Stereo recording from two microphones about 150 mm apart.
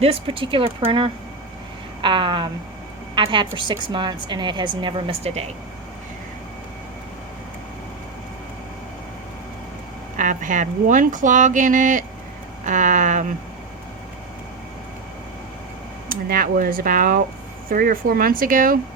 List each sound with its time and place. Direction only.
0.0 s a woman's voice: 40° right (ahead or behind)
10.2 s speech: 60° right (ahead or behind)
16.0 s speech: 70° right (ahead or behind)